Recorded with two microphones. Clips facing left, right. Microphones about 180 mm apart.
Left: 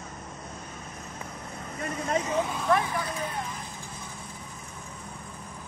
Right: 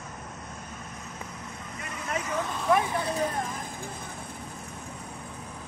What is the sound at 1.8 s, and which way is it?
Vehicle, 30° left (ahead or behind).